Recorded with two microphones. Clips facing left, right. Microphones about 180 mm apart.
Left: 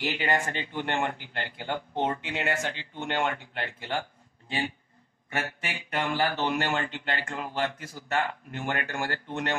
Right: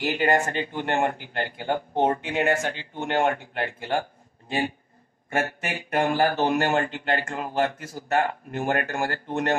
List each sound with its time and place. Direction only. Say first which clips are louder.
0.0 s speech: right 6 dB; 45° right (ahead or behind)